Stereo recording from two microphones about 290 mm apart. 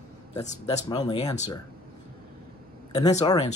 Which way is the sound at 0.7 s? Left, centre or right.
Centre.